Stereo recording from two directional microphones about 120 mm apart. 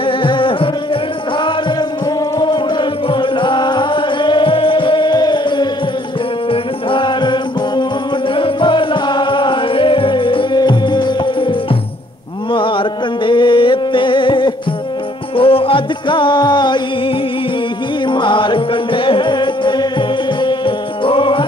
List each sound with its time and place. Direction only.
0.0 s music: 45° left (ahead or behind)
2.3 s music: 35° left (ahead or behind)
12.5 s music: 45° left (ahead or behind)
18.0 s music: 40° left (ahead or behind)